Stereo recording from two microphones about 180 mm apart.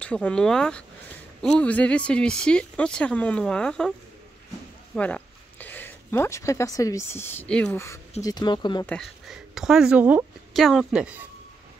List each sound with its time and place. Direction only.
0.0 s speech: 5° left (ahead or behind)
4.9 s speech: 5° left (ahead or behind); by 8.8 s 25° left (ahead or behind)
8.8 s speech: 5° left (ahead or behind)